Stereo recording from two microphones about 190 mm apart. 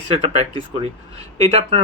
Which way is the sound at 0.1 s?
30° right (ahead or behind).